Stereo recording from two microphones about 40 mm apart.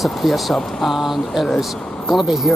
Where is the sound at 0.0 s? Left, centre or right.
Centre.